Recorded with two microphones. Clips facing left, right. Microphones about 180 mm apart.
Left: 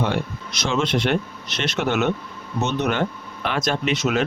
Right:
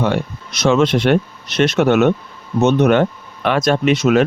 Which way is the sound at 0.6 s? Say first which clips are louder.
Right 8 dB; 60° right (ahead or behind).